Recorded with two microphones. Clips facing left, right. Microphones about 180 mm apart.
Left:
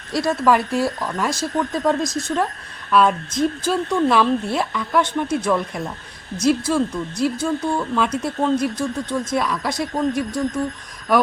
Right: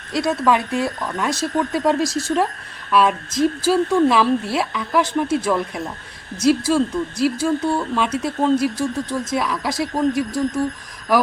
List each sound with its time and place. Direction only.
0.1 s speech: centre (ahead or behind)
2.9 s speech: centre (ahead or behind)